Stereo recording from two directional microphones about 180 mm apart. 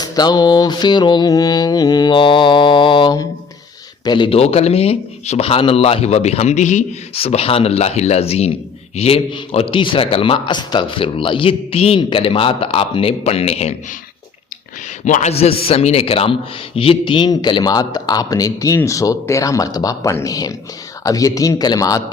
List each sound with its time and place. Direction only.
0.0 s a man's voice: 20° left (ahead or behind)
15.0 s a man's voice: 40° left (ahead or behind); by 22.0 s 20° left (ahead or behind)